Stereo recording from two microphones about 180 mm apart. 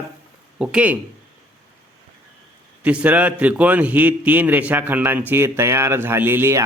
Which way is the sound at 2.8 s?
5° right (ahead or behind).